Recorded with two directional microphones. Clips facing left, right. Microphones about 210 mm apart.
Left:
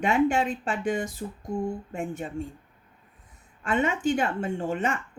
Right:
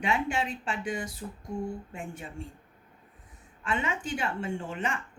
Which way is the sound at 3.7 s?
45° left (ahead or behind).